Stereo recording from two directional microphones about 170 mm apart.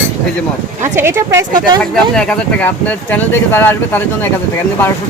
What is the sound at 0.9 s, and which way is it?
Speech, 15° right (ahead or behind).